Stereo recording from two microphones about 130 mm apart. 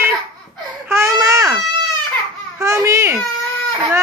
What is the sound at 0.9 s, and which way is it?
Babbling, 20° right (ahead or behind).